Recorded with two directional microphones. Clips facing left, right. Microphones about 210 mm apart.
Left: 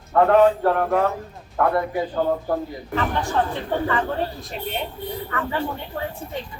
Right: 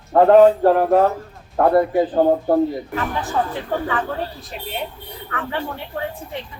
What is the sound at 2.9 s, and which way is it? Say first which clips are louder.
A woman's voice: even; 5° right (ahead or behind).